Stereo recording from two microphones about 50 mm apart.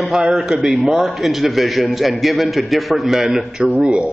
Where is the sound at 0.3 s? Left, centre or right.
Centre.